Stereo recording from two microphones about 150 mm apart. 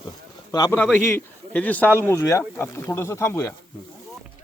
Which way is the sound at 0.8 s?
10° left (ahead or behind).